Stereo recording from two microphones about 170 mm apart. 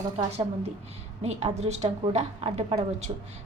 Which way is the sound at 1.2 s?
40° right (ahead or behind).